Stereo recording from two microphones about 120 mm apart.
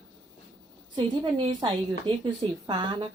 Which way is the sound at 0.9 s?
45° right (ahead or behind).